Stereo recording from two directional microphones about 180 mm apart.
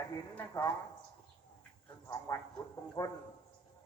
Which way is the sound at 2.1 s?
20° left (ahead or behind).